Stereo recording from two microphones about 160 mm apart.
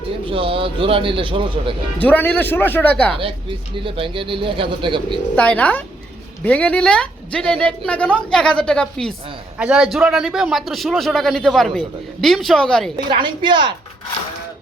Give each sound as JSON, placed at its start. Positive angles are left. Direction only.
{"t": 0.3, "sound": "a man's voice", "side_deg": -35}
{"t": 2.0, "sound": "a man's voice", "side_deg": 10}
{"t": 3.8, "sound": "a man's voice", "side_deg": -35}
{"t": 5.4, "sound": "a man's voice", "side_deg": 10}
{"t": 13.1, "sound": "a woman's voice", "side_deg": -30}